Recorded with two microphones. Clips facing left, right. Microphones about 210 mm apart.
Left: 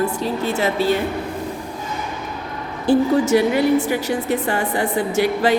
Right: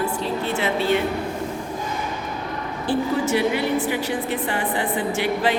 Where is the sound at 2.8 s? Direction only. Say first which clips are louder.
Left 7 dB; 40° left (ahead or behind).